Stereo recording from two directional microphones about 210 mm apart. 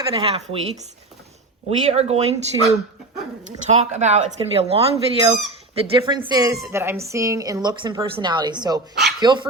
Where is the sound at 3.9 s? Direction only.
35° right (ahead or behind).